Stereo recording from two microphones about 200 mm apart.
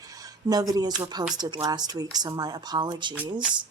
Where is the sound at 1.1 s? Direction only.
20° right (ahead or behind).